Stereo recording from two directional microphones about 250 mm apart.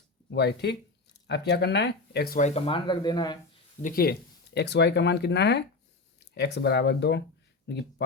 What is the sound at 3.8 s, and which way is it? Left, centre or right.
Speech, left.